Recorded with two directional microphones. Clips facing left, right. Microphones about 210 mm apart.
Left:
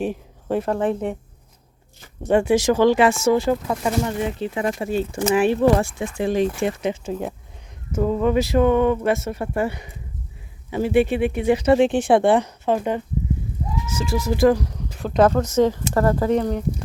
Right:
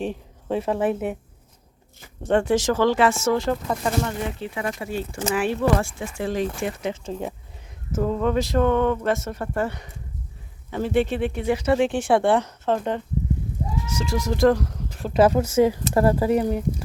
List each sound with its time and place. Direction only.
0.0 s speech: 5° left (ahead or behind)
2.2 s speech: 10° left (ahead or behind)
4.5 s speech: 25° left (ahead or behind); by 16.6 s 10° right (ahead or behind)